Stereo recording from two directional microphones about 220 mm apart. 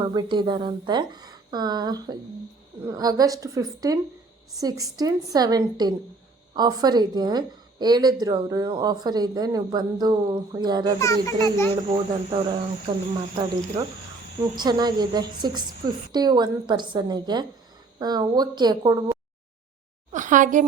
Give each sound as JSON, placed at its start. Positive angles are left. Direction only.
{"t": 0.0, "sound": "a woman's voice", "side_deg": -20}
{"t": 11.0, "sound": "a child's voice", "side_deg": 15}
{"t": 11.7, "sound": "a woman's voice", "side_deg": -20}
{"t": 14.5, "sound": "a woman's voice", "side_deg": -20}
{"t": 20.1, "sound": "a sound", "side_deg": -35}